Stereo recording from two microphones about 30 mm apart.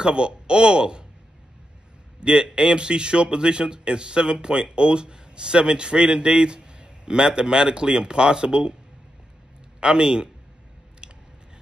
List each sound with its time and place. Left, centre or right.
0.0 s a man's voice: right
2.1 s a man's voice: right
9.8 s a man's voice: right